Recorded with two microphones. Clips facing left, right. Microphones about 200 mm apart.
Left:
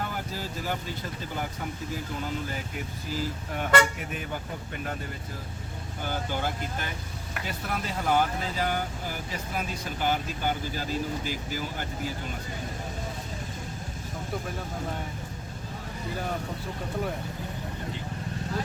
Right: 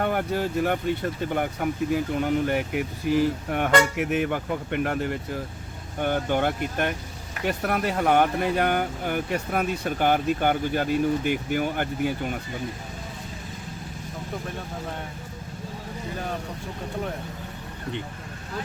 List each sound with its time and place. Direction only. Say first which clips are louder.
0.0 s speech: right 9 dB; 65° right (ahead or behind)